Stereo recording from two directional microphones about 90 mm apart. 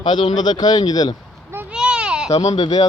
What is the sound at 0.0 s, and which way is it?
Speech, 60° left (ahead or behind).